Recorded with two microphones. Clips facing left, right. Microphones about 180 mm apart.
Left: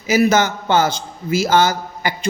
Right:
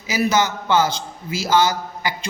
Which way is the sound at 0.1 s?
50° left (ahead or behind).